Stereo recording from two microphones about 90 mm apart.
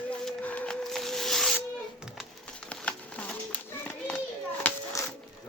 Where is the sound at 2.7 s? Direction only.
10° left (ahead or behind).